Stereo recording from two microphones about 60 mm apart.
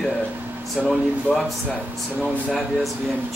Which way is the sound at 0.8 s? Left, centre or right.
Centre.